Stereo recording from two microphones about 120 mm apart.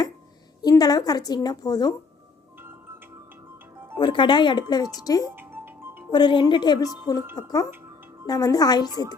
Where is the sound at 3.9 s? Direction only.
40° left (ahead or behind).